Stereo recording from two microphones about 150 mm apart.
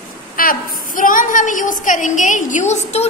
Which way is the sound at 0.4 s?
70° left (ahead or behind).